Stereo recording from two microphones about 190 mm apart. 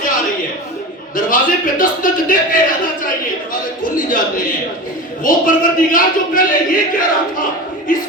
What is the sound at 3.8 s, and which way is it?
Speech, 45° left (ahead or behind).